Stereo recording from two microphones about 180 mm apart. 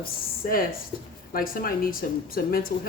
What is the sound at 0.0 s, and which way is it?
Speech, 55° left (ahead or behind).